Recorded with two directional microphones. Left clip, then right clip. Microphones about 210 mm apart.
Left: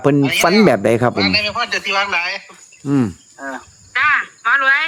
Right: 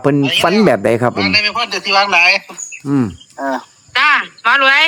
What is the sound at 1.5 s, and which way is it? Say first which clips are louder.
A man's voice: right 4 dB; 50° right (ahead or behind).